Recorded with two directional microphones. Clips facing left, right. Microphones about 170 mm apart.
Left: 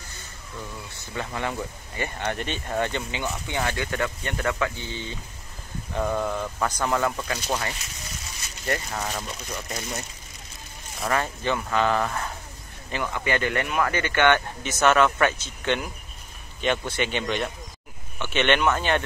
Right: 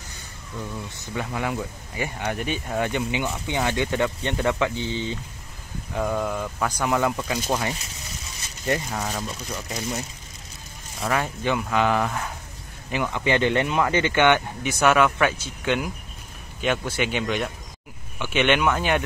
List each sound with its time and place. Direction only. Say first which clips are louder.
1.1 s speech: right 2 dB; 10° right (ahead or behind)
5.9 s speech: right 1 dB; centre (ahead or behind)
8.6 s speech: right 3 dB; 15° right (ahead or behind)